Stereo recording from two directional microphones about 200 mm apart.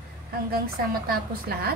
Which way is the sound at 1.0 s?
50° right (ahead or behind).